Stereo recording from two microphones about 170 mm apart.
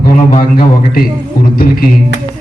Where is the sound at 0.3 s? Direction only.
60° left (ahead or behind).